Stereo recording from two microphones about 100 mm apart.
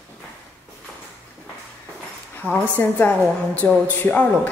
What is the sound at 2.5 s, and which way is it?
A woman's voice, 15° left (ahead or behind).